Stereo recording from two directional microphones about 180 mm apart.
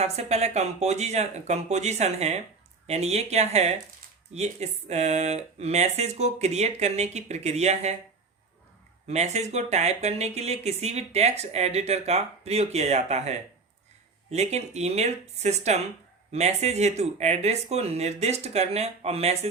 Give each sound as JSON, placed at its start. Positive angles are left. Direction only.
{"t": 0.0, "sound": "speech", "side_deg": -35}
{"t": 9.0, "sound": "speech", "side_deg": -40}